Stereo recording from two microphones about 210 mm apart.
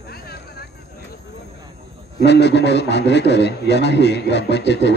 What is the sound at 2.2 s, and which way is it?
A man's voice, 55° left (ahead or behind).